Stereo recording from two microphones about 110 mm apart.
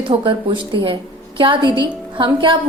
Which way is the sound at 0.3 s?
50° right (ahead or behind).